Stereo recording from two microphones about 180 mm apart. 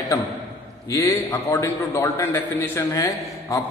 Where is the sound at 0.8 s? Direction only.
15° left (ahead or behind).